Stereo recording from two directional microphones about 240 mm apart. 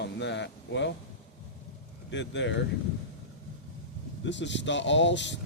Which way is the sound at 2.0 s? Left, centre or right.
Left.